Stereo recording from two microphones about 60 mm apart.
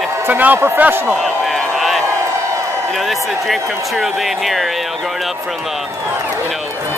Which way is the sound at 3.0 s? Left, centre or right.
Centre.